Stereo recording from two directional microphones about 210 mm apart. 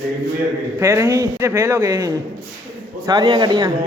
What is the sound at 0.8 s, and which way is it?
A man's voice, 15° right (ahead or behind).